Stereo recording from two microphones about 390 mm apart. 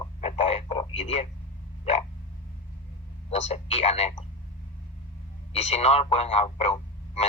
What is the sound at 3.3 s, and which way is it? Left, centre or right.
Speech, centre.